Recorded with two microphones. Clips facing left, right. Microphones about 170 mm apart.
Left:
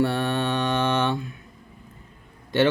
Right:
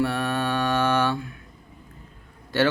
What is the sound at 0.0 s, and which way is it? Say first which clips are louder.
Mantra: left 1 dB; 30° left (ahead or behind).